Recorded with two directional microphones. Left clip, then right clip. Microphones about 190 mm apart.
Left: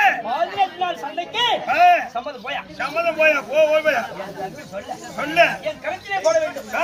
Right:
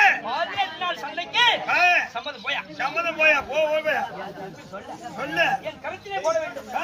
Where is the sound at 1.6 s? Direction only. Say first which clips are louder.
Left 5 dB; 5° right (ahead or behind).